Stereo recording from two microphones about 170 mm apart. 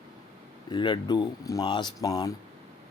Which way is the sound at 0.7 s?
25° left (ahead or behind).